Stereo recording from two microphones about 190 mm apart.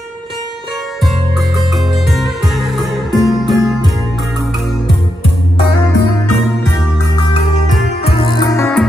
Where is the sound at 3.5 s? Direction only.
15° right (ahead or behind).